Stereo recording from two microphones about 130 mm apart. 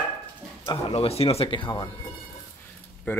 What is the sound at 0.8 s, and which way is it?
Speech, 50° left (ahead or behind).